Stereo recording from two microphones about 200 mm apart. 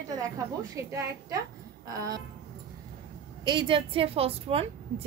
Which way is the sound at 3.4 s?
25° right (ahead or behind).